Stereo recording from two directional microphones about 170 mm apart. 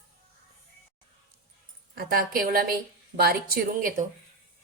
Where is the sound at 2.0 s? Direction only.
60° right (ahead or behind).